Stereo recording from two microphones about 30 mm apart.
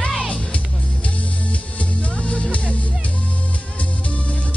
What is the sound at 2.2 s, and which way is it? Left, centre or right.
Music, left.